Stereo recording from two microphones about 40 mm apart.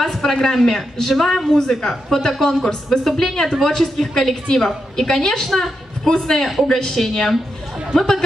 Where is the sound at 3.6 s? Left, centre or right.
Centre.